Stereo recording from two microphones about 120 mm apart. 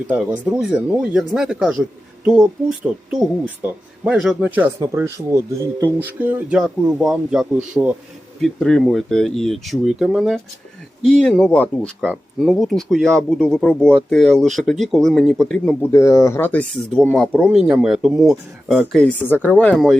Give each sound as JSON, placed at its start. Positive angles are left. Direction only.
{"t": 0.1, "sound": "speech", "side_deg": -10}
{"t": 3.6, "sound": "speech", "side_deg": -15}
{"t": 4.0, "sound": "speech", "side_deg": -5}
{"t": 4.9, "sound": "speech", "side_deg": -25}
{"t": 8.4, "sound": "speech", "side_deg": 5}
{"t": 15.9, "sound": "speech", "side_deg": 25}
{"t": 19.2, "sound": "speech", "side_deg": 15}